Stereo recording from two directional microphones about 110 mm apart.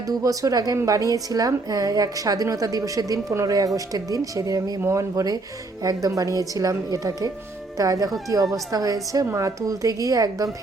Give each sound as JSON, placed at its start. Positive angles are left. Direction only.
{"t": 0.0, "sound": "a woman's voice", "side_deg": -30}